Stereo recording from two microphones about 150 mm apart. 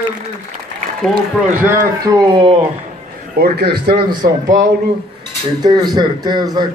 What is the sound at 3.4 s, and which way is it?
A man's voice, 90° right.